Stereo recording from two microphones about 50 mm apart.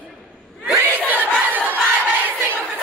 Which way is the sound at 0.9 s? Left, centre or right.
Right.